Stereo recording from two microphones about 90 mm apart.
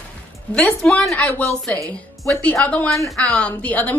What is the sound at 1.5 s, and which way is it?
Speech, 40° right (ahead or behind).